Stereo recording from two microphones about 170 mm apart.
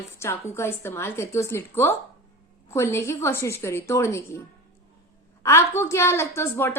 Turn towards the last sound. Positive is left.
turn(degrees=15)  # may be behind; listen again after turning